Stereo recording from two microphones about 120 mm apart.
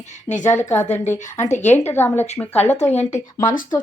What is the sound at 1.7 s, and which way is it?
A woman's voice, 20° left (ahead or behind).